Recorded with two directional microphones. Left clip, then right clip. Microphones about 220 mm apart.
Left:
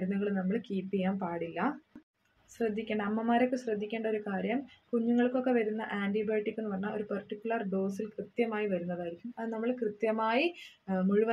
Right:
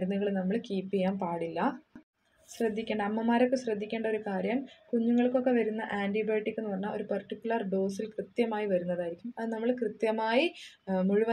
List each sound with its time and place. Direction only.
0.2 s a woman's voice: 20° right (ahead or behind)